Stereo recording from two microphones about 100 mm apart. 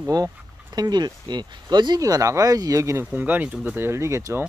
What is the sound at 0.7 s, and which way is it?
Speech, 45° right (ahead or behind).